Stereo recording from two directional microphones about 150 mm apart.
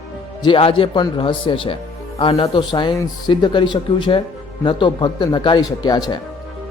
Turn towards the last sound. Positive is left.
turn(degrees=30)  # may be behind; listen again after turning